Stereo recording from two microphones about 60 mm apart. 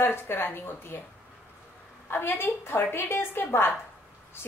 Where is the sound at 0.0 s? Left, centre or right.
Left.